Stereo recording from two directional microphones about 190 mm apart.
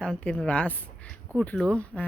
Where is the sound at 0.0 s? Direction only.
5° left (ahead or behind).